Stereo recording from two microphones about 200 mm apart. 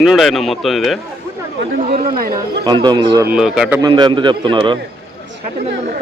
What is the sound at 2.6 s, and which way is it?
Speech, 20° right (ahead or behind).